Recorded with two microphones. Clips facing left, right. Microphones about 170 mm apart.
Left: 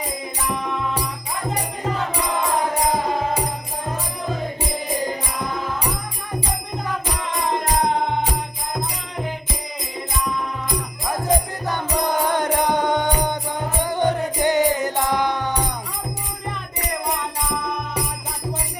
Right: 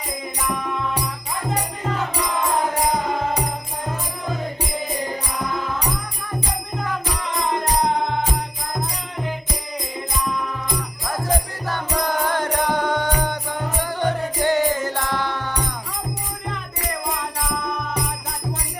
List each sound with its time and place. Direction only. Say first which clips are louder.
11.6 s music: left 1 dB; 20° left (ahead or behind)